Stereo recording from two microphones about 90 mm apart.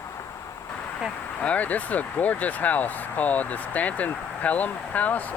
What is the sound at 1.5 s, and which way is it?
Speech, 15° left (ahead or behind).